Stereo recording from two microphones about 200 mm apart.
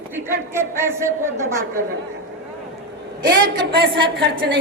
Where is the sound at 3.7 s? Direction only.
55° right (ahead or behind).